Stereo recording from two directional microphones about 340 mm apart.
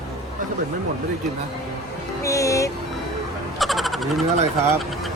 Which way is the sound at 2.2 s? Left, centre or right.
Centre.